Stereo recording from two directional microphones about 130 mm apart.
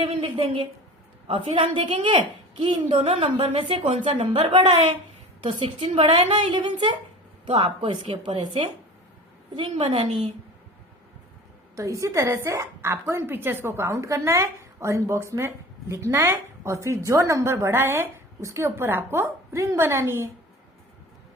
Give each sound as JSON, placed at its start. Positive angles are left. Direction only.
{"t": 0.0, "sound": "a woman's voice", "side_deg": -50}
{"t": 3.0, "sound": "a woman's voice", "side_deg": -55}
{"t": 11.8, "sound": "a woman's voice", "side_deg": -25}